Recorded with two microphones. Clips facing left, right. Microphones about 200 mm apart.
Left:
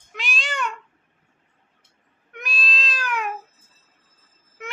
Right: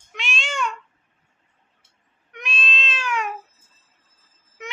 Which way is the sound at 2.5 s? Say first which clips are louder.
Right 1 dB; 35° left (ahead or behind).